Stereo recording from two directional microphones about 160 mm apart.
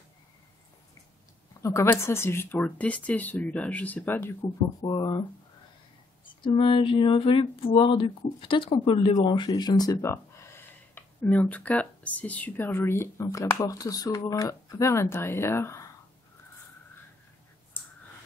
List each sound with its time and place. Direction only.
1.6 s speech: 20° left (ahead or behind)
6.4 s a sound: 35° left (ahead or behind)
9.2 s speech: 30° left (ahead or behind)